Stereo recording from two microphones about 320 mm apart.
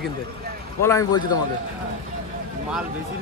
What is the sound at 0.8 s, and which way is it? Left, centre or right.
Speech, centre.